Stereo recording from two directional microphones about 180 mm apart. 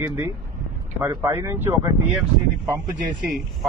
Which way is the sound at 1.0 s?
15° right (ahead or behind).